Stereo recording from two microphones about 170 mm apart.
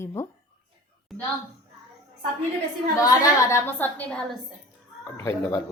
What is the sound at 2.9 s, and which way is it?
Speech, 20° left (ahead or behind).